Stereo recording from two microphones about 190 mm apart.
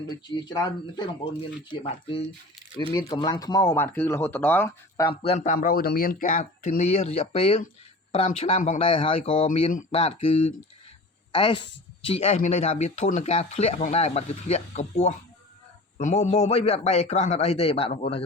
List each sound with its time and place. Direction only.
0.3 s speech: 20° left (ahead or behind)
5.2 s speech: 35° left (ahead or behind)
11.3 s speech: 25° left (ahead or behind)